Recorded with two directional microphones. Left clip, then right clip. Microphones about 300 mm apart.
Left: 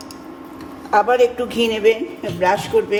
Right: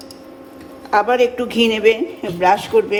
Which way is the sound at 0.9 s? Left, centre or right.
Right.